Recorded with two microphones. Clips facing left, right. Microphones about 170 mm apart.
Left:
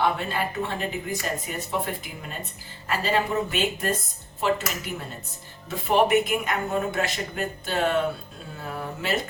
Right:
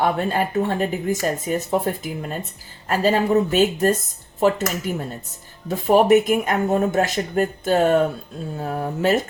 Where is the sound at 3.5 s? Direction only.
45° right (ahead or behind).